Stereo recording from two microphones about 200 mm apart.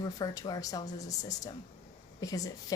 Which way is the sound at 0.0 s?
20° left (ahead or behind).